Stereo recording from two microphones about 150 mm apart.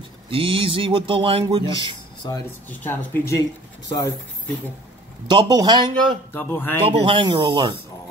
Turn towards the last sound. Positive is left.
turn(degrees=-35)  # may be behind; listen again after turning